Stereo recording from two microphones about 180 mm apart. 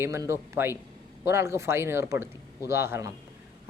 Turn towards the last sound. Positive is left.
turn(degrees=-15)  # may be behind; listen again after turning